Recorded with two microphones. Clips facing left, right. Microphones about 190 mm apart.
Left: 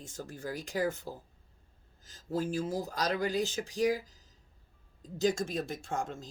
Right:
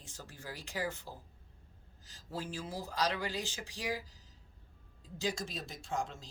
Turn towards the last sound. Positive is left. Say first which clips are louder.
# left 3 dB
turn(degrees=50)  # may be behind; listen again after turning